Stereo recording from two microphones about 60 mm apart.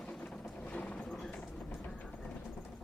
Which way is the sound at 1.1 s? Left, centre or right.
Centre.